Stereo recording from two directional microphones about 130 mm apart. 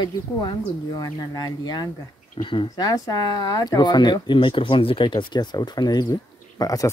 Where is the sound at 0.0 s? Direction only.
35° left (ahead or behind).